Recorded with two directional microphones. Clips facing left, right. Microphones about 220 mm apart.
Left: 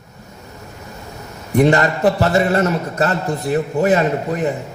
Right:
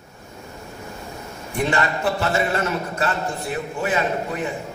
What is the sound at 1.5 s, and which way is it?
A man's voice, 40° left (ahead or behind).